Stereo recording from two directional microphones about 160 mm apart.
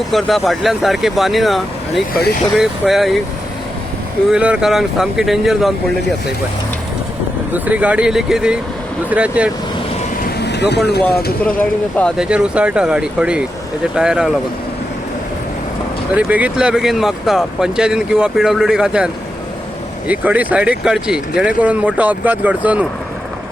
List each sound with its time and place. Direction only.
0.1 s speech: centre (ahead or behind)
4.3 s speech: 5° right (ahead or behind)
7.5 s speech: 10° right (ahead or behind)
10.2 s vehicle: 90° left
12.1 s speech: 5° right (ahead or behind)
16.1 s speech: 10° right (ahead or behind)